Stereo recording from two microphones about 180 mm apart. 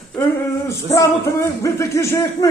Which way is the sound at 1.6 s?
15° left (ahead or behind).